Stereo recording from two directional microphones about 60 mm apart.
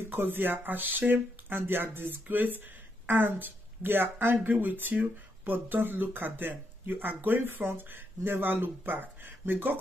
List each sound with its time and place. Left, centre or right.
0.0 s speech: right